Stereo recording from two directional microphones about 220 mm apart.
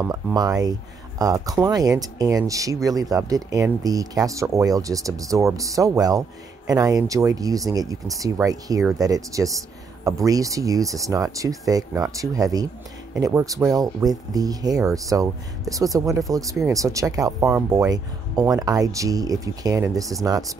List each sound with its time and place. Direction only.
0.1 s speech: 15° right (ahead or behind)